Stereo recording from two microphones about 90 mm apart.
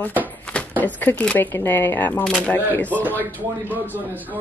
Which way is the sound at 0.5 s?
15° left (ahead or behind).